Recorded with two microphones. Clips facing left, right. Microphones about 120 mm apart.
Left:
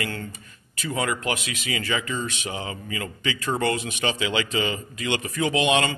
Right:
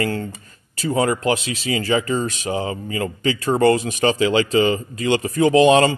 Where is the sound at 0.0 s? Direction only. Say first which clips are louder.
Right 8 dB; 35° right (ahead or behind).